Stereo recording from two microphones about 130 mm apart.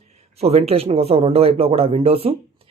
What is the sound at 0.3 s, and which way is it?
Speech, 55° right (ahead or behind).